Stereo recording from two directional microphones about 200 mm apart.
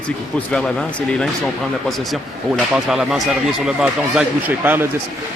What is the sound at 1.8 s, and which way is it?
Speech, centre (ahead or behind).